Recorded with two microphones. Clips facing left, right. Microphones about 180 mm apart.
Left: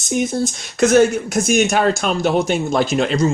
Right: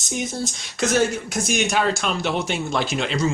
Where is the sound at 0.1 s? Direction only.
50° left (ahead or behind).